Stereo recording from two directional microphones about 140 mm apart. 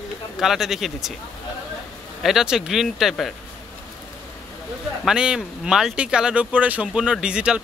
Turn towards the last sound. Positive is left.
turn(degrees=-5)  # may be behind; listen again after turning